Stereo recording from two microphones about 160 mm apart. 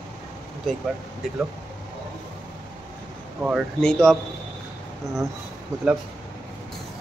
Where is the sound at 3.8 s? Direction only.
5° left (ahead or behind).